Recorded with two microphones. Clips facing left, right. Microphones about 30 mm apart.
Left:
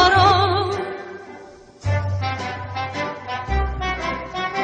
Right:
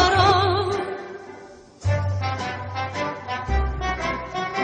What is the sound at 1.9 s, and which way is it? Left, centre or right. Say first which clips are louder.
Music: left 1 dB; centre.